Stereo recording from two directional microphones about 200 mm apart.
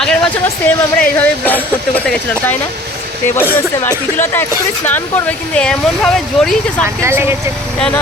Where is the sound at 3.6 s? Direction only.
10° left (ahead or behind).